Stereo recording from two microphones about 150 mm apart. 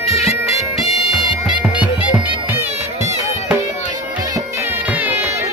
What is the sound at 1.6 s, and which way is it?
Bagpipes, 10° right (ahead or behind).